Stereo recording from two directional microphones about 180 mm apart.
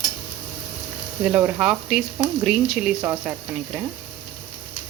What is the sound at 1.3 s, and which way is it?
Speech, 10° right (ahead or behind).